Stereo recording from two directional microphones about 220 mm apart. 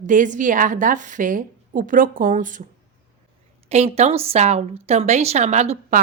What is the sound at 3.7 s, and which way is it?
A woman's voice, 30° right (ahead or behind).